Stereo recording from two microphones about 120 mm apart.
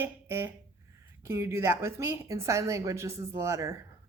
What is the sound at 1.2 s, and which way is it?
Speech, 20° right (ahead or behind).